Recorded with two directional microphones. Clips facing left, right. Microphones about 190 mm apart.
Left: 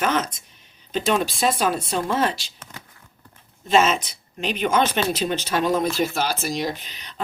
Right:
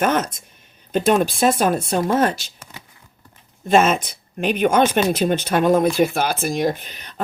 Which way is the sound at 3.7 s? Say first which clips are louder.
Right 3 dB; 55° right (ahead or behind).